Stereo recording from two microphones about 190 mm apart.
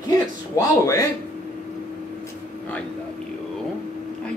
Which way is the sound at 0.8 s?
15° left (ahead or behind).